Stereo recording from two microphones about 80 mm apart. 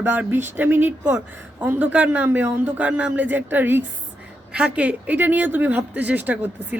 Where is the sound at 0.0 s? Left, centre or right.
Right.